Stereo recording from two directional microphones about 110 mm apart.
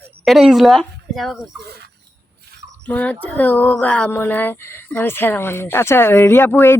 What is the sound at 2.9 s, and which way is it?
Speech, 15° left (ahead or behind).